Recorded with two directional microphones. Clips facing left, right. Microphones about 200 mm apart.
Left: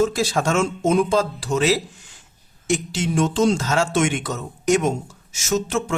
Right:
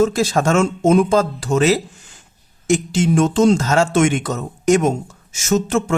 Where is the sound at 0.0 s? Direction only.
45° right (ahead or behind).